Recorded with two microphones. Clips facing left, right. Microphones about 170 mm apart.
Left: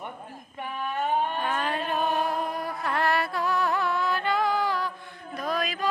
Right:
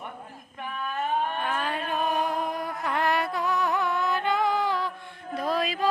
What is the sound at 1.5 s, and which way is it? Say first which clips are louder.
Music: left 1 dB; 5° right (ahead or behind).